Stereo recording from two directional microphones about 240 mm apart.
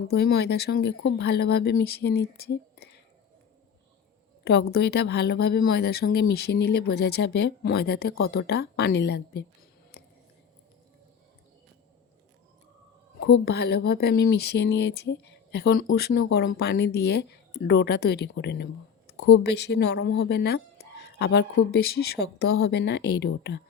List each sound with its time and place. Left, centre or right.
0.1 s speech: left
4.4 s speech: left
13.1 s speech: left
19.1 s a sound: left
19.4 s speech: left